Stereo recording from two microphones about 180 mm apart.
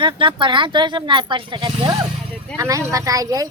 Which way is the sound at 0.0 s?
30° right (ahead or behind).